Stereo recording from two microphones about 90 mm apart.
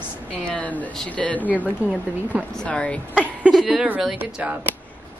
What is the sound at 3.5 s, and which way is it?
Speech, 5° right (ahead or behind).